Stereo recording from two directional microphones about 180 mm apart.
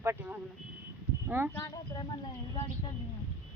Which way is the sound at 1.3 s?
15° right (ahead or behind).